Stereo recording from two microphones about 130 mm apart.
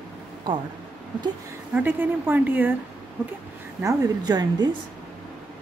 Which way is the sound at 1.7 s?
15° right (ahead or behind).